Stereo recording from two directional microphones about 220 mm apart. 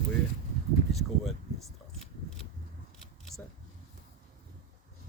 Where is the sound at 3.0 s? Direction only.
Centre (ahead or behind).